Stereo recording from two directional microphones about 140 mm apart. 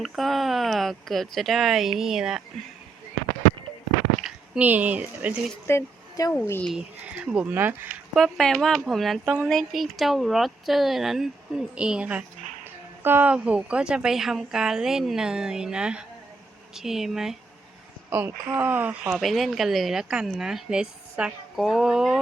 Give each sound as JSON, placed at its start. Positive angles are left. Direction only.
{"t": 0.0, "sound": "speech", "side_deg": 0}
{"t": 4.2, "sound": "speech", "side_deg": -10}
{"t": 5.6, "sound": "a woman's voice", "side_deg": 20}
{"t": 6.7, "sound": "speech", "side_deg": -5}
{"t": 8.1, "sound": "speech", "side_deg": 0}
{"t": 9.2, "sound": "speech", "side_deg": -15}
{"t": 9.5, "sound": "speech", "side_deg": 0}
{"t": 18.1, "sound": "speech", "side_deg": -15}